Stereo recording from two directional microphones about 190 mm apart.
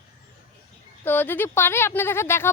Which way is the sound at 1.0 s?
10° left (ahead or behind).